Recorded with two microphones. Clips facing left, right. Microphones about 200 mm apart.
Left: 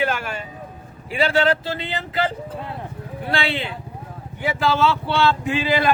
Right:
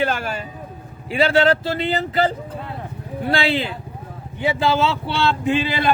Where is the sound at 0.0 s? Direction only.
40° right (ahead or behind).